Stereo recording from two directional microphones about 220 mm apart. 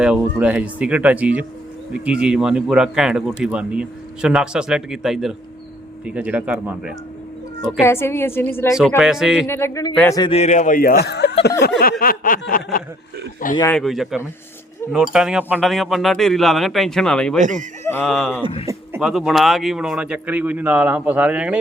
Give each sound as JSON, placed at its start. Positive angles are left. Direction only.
{"t": 0.0, "sound": "speech", "side_deg": -5}
{"t": 7.6, "sound": "a woman's voice", "side_deg": 10}
{"t": 9.0, "sound": "speech", "side_deg": 0}
{"t": 9.5, "sound": "a woman's voice", "side_deg": 10}
{"t": 10.2, "sound": "speech", "side_deg": 25}
{"t": 13.6, "sound": "speech", "side_deg": 5}
{"t": 17.4, "sound": "speech", "side_deg": -35}
{"t": 17.8, "sound": "speech", "side_deg": 5}